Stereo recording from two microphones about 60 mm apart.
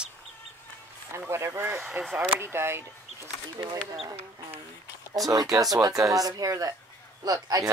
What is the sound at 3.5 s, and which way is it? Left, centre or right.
Speech, right.